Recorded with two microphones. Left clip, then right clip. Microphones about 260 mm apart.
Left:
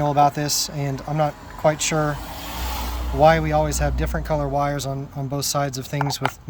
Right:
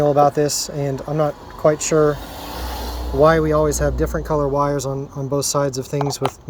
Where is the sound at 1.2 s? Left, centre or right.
Centre.